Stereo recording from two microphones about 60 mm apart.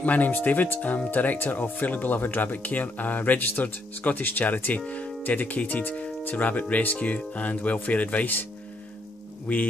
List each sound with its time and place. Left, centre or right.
0.0 s speech: left
9.5 s speech: left